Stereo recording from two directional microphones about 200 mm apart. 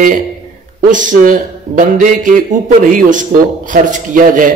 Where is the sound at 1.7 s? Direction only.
40° right (ahead or behind).